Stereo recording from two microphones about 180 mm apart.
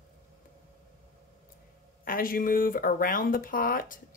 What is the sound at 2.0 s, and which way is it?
Speech, 50° left (ahead or behind).